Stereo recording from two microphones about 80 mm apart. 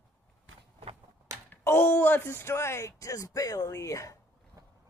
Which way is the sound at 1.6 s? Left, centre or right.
Left.